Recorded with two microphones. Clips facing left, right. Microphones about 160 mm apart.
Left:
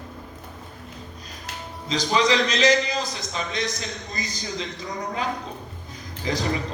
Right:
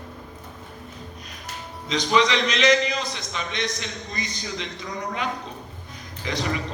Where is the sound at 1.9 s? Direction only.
35° left (ahead or behind).